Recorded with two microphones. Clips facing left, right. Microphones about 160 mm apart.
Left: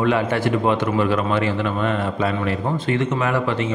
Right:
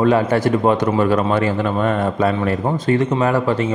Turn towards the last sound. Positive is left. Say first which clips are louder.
# right 4 dB
turn(degrees=-35)  # may be behind; listen again after turning